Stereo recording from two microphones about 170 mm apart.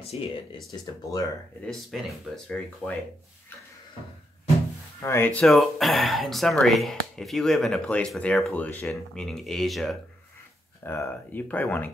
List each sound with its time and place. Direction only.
0.0 s speech: 35° left (ahead or behind)
1.7 s speech: centre (ahead or behind)
5.0 s speech: 15° left (ahead or behind)
10.8 s speech: 15° left (ahead or behind)